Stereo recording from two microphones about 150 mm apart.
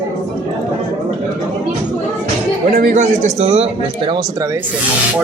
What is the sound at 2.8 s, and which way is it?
A man's voice, 55° right (ahead or behind).